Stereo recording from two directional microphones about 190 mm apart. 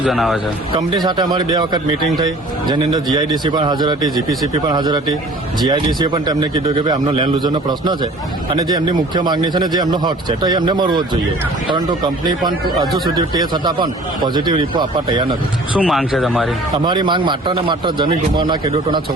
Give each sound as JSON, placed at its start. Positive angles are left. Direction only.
{"t": 0.0, "sound": "speech", "side_deg": 0}
{"t": 0.8, "sound": "speech", "side_deg": -20}
{"t": 15.8, "sound": "speech", "side_deg": 0}
{"t": 16.7, "sound": "speech", "side_deg": -25}